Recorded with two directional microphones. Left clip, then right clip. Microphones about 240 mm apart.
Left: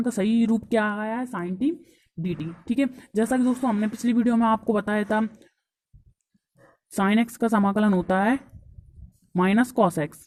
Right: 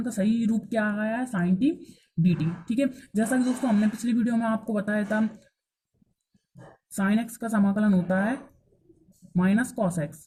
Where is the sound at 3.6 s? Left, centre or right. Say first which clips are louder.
Left 1 dB; left.